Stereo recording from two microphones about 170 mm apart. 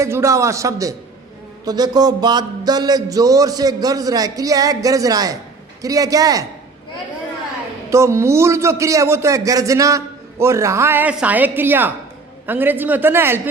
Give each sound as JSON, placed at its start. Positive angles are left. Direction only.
{"t": 0.0, "sound": "a man's voice", "side_deg": -15}
{"t": 1.6, "sound": "a sound", "side_deg": -25}
{"t": 7.9, "sound": "a man's voice", "side_deg": -15}